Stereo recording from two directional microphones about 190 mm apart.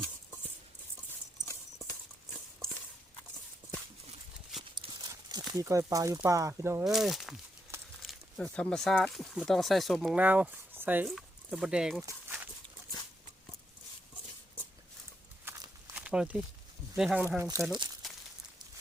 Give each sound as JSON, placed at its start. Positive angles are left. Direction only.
{"t": 4.7, "sound": "speech", "side_deg": -20}
{"t": 6.8, "sound": "speech", "side_deg": 0}
{"t": 12.0, "sound": "dog", "side_deg": -10}
{"t": 15.4, "sound": "walk", "side_deg": -10}
{"t": 17.0, "sound": "speech", "side_deg": -5}
{"t": 17.2, "sound": "speech", "side_deg": -15}
{"t": 18.0, "sound": "walk", "side_deg": 0}